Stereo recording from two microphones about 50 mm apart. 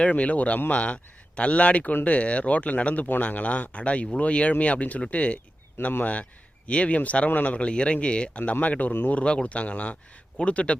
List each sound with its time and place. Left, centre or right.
0.0 s speech: left
5.8 s speech: left
6.7 s speech: left
9.2 s speech: left